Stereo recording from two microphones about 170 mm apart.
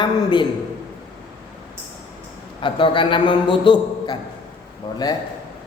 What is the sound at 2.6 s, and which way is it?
A man's voice, 30° left (ahead or behind).